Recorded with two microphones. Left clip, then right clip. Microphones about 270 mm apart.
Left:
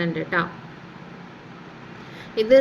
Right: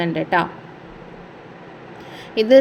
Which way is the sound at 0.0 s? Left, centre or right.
Centre.